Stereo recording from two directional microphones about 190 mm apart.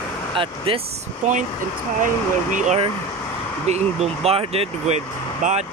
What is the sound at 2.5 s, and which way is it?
Speech, 40° right (ahead or behind).